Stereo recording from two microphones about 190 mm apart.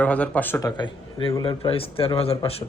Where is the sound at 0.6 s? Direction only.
20° left (ahead or behind).